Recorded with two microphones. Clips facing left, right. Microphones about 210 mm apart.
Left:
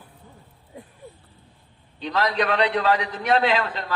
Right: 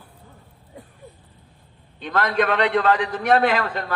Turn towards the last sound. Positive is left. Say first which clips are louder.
# right 1 dB
turn(degrees=-50)  # may be behind; listen again after turning